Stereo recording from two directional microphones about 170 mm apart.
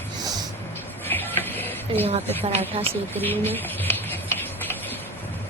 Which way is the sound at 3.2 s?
10° left (ahead or behind).